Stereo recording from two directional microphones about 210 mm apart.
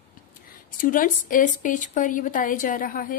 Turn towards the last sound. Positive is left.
turn(degrees=40)  # may be behind; listen again after turning